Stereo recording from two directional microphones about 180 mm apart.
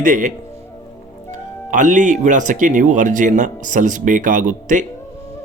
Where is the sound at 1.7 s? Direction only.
45° right (ahead or behind).